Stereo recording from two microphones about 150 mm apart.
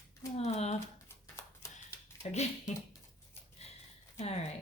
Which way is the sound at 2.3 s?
50° left (ahead or behind).